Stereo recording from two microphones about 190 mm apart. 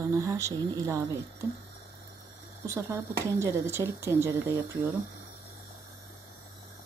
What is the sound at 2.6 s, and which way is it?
Speech, 15° right (ahead or behind).